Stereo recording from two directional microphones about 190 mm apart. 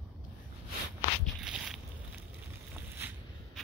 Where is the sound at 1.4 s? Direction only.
5° right (ahead or behind).